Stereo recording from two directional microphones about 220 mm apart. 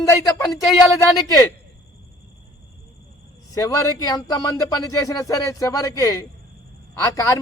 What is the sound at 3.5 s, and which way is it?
A man's voice, 15° left (ahead or behind).